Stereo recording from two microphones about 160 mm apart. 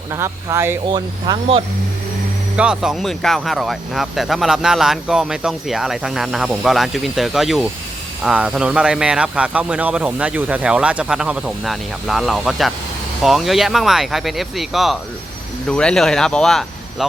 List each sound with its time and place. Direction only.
0.1 s speech: 15° right (ahead or behind)
0.9 s speech: 30° right (ahead or behind)
2.6 s speech: 5° right (ahead or behind)